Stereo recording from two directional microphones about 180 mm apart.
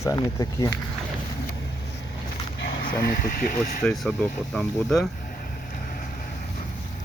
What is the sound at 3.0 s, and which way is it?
Speech, 60° left (ahead or behind).